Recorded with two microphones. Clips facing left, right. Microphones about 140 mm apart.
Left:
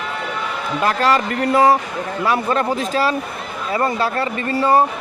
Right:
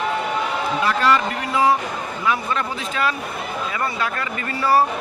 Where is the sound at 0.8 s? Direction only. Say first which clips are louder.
Left 3 dB; 40° left (ahead or behind).